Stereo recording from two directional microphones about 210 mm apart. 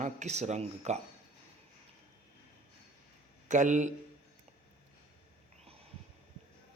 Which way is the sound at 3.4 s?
35° right (ahead or behind).